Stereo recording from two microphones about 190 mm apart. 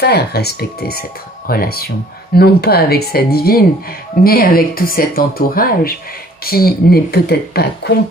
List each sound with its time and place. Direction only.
0.0 s speech: 55° left (ahead or behind)